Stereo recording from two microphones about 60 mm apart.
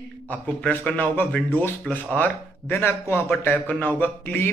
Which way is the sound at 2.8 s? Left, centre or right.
Left.